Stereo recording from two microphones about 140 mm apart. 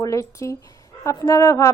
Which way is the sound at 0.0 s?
20° left (ahead or behind).